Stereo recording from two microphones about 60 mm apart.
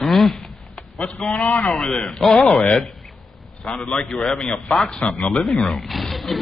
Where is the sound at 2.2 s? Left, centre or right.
Centre.